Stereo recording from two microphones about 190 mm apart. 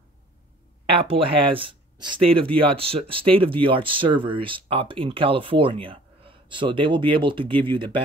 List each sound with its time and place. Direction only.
0.8 s speech: 30° right (ahead or behind)